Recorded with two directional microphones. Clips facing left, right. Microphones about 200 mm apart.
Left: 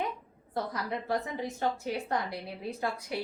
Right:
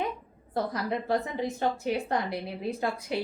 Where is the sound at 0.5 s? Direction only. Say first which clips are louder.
Right 4 dB; 30° right (ahead or behind).